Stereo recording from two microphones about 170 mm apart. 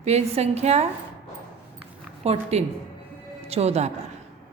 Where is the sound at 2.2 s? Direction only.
40° right (ahead or behind).